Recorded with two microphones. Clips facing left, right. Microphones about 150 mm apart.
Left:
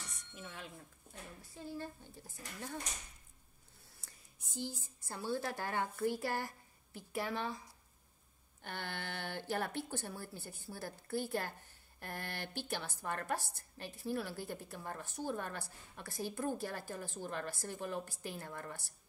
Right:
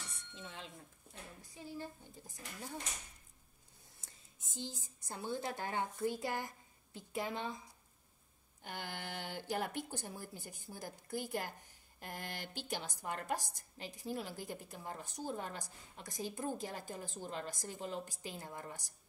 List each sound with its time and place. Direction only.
0.1 s a sound: 25° right (ahead or behind)
1.4 s a woman's voice: 15° right (ahead or behind)
4.0 s a woman's voice: 20° right (ahead or behind)
8.6 s a woman's voice: 15° right (ahead or behind)